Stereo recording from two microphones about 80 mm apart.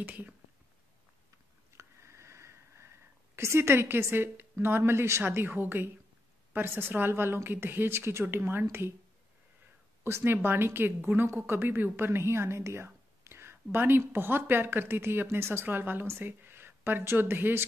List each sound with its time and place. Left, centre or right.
0.0 s a woman's voice: right
1.7 s sniff: right
3.3 s a woman's voice: right
10.0 s a woman's voice: right